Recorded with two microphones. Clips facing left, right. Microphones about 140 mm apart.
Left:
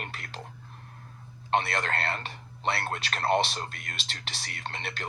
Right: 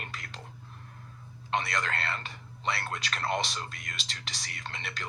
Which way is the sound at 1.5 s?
60° left (ahead or behind).